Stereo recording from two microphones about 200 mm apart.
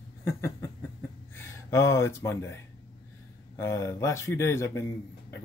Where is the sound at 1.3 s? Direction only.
15° left (ahead or behind).